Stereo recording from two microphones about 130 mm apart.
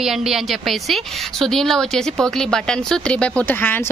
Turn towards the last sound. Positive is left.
turn(degrees=15)  # may be behind; listen again after turning